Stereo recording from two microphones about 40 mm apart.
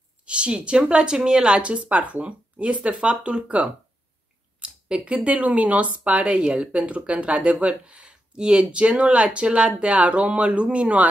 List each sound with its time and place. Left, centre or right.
0.2 s a woman's voice: right
4.6 s a sound: right
5.1 s a woman's voice: right